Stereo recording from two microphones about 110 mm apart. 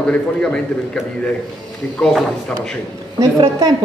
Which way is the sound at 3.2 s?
35° right (ahead or behind).